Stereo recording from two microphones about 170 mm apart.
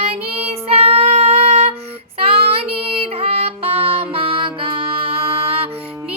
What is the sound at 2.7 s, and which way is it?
Music, 35° right (ahead or behind).